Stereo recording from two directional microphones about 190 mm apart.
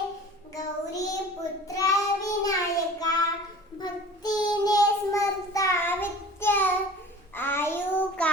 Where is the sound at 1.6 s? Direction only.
20° left (ahead or behind).